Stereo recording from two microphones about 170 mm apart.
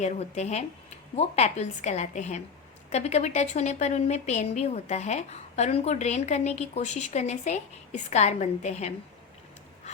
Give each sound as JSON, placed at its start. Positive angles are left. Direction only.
{"t": 0.0, "sound": "a woman's voice", "side_deg": 40}